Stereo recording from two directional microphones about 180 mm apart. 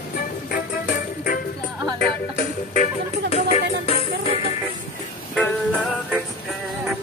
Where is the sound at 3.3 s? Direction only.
35° left (ahead or behind).